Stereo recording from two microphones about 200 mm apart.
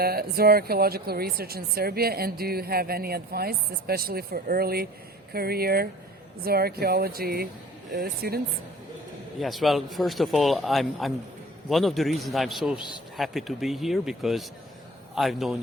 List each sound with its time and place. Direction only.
0.0 s speech: 50° right (ahead or behind)
9.4 s a man's voice: centre (ahead or behind)